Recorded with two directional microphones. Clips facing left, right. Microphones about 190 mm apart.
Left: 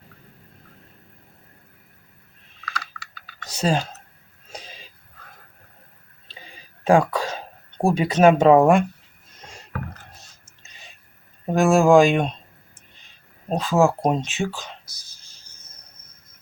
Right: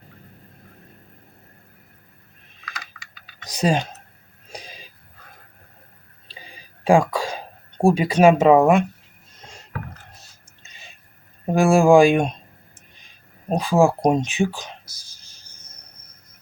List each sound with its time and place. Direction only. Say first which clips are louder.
3.4 s speech: right 2 dB; 15° right (ahead or behind)
4.5 s a sound: right 1 dB; 15° right (ahead or behind)
6.8 s speech: right 1 dB; 10° right (ahead or behind)
11.4 s speech: right 1 dB; 15° right (ahead or behind)
13.5 s speech: right 1 dB; 15° right (ahead or behind)